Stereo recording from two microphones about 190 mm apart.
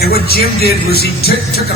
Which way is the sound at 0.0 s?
55° left (ahead or behind).